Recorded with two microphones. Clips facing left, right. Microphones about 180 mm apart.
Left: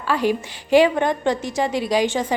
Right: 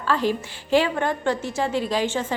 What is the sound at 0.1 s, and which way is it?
A woman's voice, 15° left (ahead or behind).